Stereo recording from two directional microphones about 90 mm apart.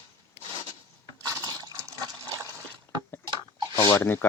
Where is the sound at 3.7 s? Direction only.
45° left (ahead or behind).